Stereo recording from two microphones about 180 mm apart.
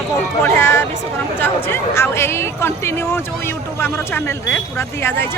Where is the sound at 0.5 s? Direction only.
15° left (ahead or behind).